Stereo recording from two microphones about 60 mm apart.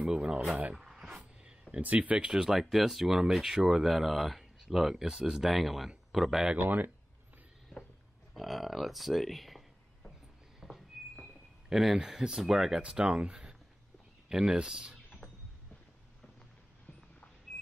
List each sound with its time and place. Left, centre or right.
0.0 s speech: centre
0.7 s a sound: centre
1.8 s speech: right; by 6.5 s centre
6.6 s speech: right
8.4 s speech: centre
10.6 s a sound: centre
11.7 s speech: centre